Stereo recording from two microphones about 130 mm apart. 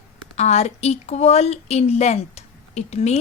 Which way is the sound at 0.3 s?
55° left (ahead or behind).